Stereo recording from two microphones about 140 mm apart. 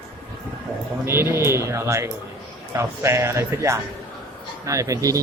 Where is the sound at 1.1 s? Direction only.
15° right (ahead or behind).